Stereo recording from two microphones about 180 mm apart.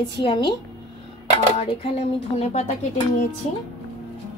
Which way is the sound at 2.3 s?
35° left (ahead or behind).